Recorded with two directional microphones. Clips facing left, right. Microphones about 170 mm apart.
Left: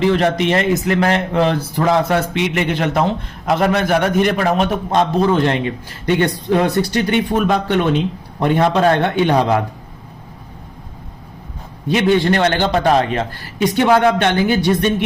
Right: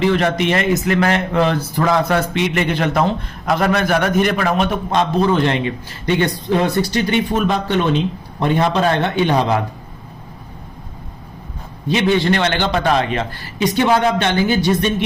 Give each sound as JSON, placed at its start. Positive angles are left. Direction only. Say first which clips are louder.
{"t": 0.1, "sound": "speech", "louder": "left 1 dB", "side_deg": 30}
{"t": 11.9, "sound": "a man's voice", "louder": "left 1 dB", "side_deg": 50}